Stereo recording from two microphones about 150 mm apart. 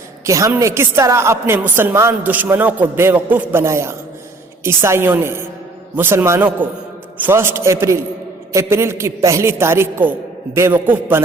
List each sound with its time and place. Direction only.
0.3 s a woman's voice: 20° right (ahead or behind)